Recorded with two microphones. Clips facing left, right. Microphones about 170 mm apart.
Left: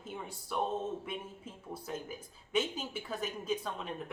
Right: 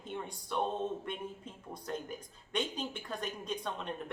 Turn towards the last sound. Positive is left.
turn(degrees=5)  # may be behind; listen again after turning